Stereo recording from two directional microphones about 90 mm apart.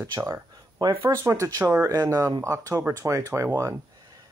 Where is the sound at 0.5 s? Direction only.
50° right (ahead or behind).